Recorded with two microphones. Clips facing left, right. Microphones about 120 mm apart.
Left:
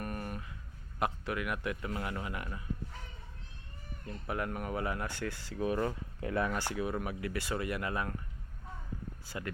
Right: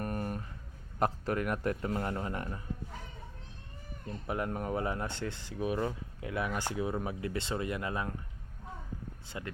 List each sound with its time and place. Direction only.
0.0 s a sound: 35° right (ahead or behind)
0.9 s a man's voice: 40° right (ahead or behind)
4.0 s speech: 25° right (ahead or behind)
9.2 s speech: 25° right (ahead or behind)